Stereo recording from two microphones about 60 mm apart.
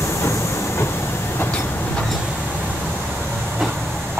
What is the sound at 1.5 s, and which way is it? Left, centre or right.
Train, left.